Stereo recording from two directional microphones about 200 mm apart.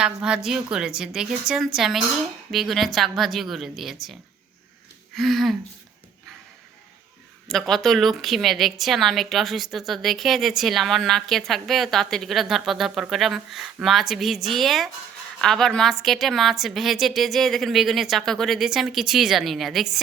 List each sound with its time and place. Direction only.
0.0 s a woman's voice: 5° right (ahead or behind)
5.1 s a woman's voice: centre (ahead or behind)
7.4 s a woman's voice: centre (ahead or behind)